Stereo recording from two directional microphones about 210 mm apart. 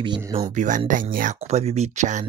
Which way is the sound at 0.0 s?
20° right (ahead or behind).